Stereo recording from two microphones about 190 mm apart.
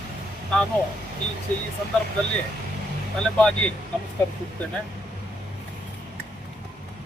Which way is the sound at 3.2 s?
5° left (ahead or behind).